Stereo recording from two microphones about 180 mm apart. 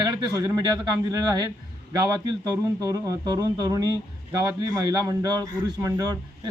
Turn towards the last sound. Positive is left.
turn(degrees=-20)  # may be behind; listen again after turning